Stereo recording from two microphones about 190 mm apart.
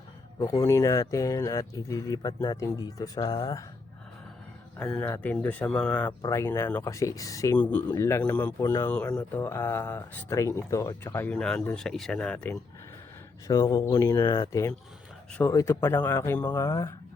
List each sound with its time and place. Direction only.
0.3 s speech: 15° left (ahead or behind)
4.8 s speech: 5° left (ahead or behind)
13.5 s speech: 20° left (ahead or behind)